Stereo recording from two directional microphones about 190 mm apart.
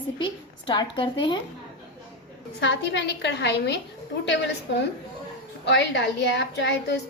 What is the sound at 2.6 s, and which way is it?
A woman's voice, 65° left (ahead or behind).